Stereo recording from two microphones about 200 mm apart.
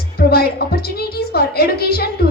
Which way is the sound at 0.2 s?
50° left (ahead or behind).